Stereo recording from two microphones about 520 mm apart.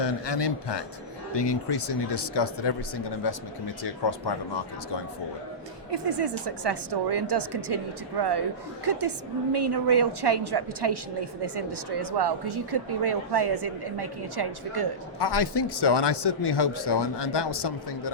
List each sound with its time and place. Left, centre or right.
0.0 s speech: left
5.9 s a woman's voice: right
8.8 s a woman's voice: right
15.2 s speech: left